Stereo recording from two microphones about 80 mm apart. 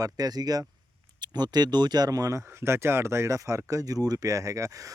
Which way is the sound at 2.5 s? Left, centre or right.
Right.